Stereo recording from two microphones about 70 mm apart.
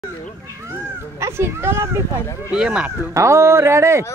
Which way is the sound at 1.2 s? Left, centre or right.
Right.